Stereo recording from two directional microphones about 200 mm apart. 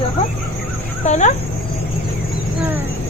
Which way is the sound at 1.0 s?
35° left (ahead or behind).